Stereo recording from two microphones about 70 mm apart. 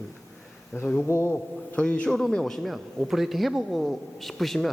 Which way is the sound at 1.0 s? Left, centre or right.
Left.